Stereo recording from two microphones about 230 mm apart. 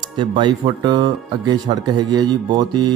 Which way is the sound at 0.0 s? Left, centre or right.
Centre.